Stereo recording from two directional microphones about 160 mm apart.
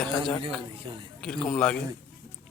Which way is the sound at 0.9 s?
30° right (ahead or behind).